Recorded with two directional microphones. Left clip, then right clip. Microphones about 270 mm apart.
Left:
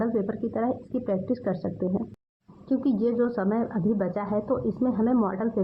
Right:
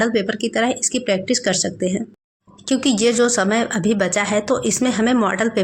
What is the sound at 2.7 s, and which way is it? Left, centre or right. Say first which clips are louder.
Speech: right 8 dB; right.